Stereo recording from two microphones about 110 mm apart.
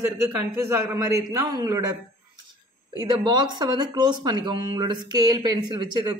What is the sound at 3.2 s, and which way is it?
Speech, 40° right (ahead or behind).